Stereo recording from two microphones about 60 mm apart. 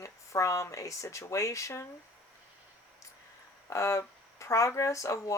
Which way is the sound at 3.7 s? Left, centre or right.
Left.